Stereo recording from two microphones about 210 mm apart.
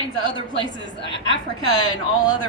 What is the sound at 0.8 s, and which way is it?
Speech, 60° left (ahead or behind).